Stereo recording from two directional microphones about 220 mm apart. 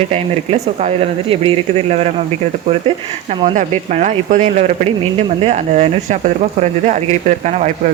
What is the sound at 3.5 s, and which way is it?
Speech, 35° right (ahead or behind).